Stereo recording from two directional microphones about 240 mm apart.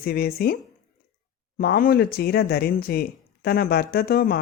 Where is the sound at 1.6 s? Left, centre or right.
Left.